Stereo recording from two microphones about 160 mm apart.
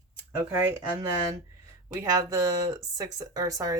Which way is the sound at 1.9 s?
20° right (ahead or behind).